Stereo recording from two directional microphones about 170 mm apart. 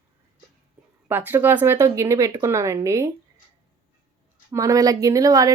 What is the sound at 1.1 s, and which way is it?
Speech, 10° right (ahead or behind).